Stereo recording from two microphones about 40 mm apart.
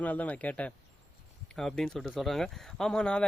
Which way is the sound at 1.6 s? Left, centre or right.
Centre.